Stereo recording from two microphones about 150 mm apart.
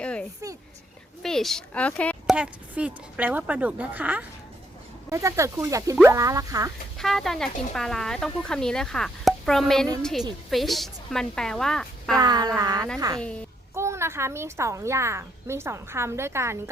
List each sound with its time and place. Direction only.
0.0 s a sound: 5° left (ahead or behind)
2.3 s a woman's voice: 10° right (ahead or behind)
7.0 s speech: centre (ahead or behind)
12.2 s a woman's voice: 25° right (ahead or behind)